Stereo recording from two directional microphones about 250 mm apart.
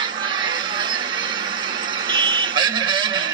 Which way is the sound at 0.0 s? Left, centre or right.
Centre.